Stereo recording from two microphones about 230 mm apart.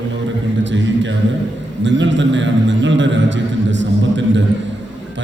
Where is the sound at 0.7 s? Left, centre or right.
Right.